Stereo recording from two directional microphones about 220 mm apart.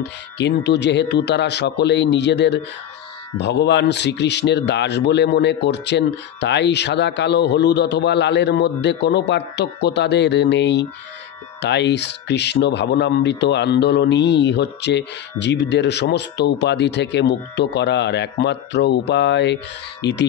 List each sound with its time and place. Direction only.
0.4 s speech: 50° left (ahead or behind)